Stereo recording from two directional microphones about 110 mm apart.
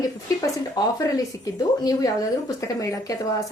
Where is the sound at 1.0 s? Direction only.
35° left (ahead or behind).